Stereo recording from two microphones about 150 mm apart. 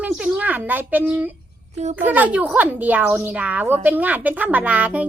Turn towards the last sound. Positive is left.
turn(degrees=-10)  # may be behind; listen again after turning